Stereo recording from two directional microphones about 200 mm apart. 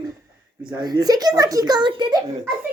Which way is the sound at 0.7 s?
20° right (ahead or behind).